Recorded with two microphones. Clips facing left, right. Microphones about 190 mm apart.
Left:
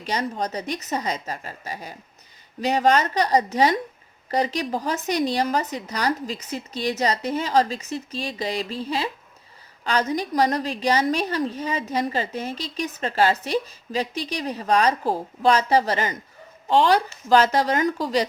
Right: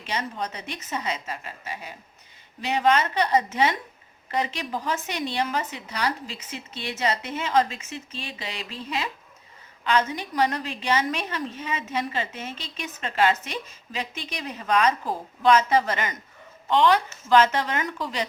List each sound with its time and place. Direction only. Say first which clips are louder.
0.0 s a woman's voice: left 4 dB; 40° left (ahead or behind)